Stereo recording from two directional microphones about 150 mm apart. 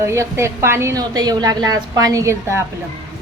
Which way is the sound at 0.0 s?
20° right (ahead or behind).